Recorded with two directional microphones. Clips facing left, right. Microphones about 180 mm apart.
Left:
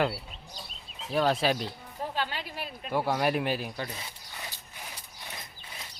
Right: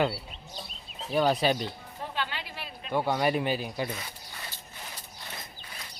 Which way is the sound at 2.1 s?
40° left (ahead or behind).